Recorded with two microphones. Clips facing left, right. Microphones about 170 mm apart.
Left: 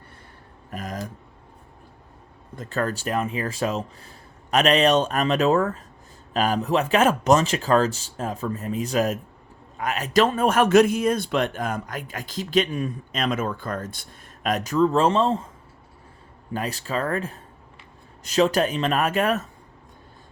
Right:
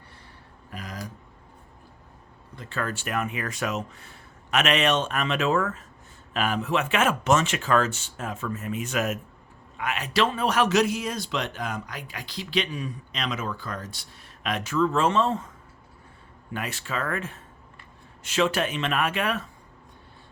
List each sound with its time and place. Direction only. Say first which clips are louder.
0.7 s a sound: left 6 dB; 45° left (ahead or behind)
2.6 s a man's voice: left 5 dB; 40° left (ahead or behind)
16.5 s speech: left 4 dB; 35° left (ahead or behind)